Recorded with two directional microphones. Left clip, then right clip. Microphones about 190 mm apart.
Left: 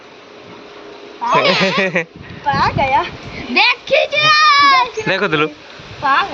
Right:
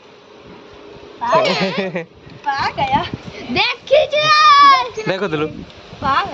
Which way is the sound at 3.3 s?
60° right (ahead or behind).